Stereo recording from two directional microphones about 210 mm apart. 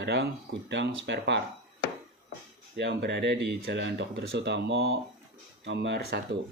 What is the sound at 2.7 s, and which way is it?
Speech, 55° right (ahead or behind).